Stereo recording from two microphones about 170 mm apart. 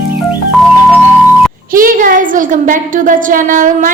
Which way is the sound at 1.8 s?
55° right (ahead or behind).